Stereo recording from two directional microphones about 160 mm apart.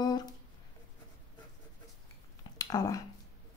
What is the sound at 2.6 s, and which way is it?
Speech, 25° left (ahead or behind).